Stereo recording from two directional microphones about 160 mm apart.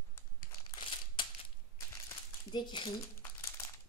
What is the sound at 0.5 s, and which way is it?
Crumpling, 30° left (ahead or behind).